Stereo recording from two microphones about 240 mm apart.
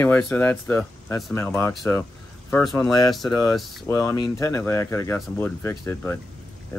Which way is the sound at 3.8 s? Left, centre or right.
Centre.